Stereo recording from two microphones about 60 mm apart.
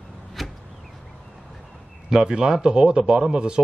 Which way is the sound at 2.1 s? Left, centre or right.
Centre.